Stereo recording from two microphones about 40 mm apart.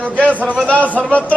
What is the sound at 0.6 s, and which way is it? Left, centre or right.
Speech, left.